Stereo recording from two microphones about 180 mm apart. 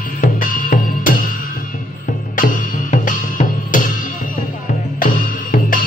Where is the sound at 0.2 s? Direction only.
50° left (ahead or behind).